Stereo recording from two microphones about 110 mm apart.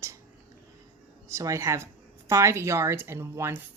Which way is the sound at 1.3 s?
30° right (ahead or behind).